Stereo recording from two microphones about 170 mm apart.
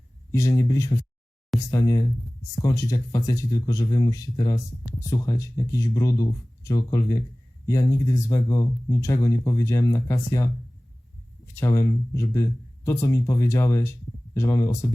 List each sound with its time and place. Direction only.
0.3 s speech: 15° left (ahead or behind)
11.5 s speech: 15° left (ahead or behind)